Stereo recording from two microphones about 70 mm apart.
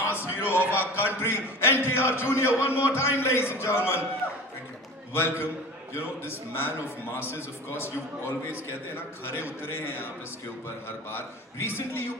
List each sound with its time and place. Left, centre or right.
0.1 s music: left
0.5 s a man's voice: left
5.1 s a man's voice: left
9.2 s a man's voice: left
11.6 s a man's voice: left